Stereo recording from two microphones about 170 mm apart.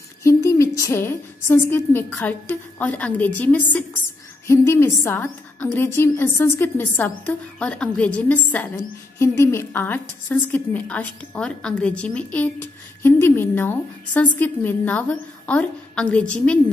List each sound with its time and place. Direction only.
0.2 s speech: 20° left (ahead or behind)